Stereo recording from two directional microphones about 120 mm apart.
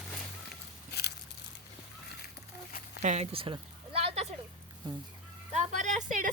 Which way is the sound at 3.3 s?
50° right (ahead or behind).